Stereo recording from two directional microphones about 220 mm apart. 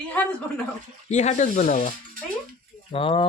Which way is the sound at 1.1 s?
30° left (ahead or behind).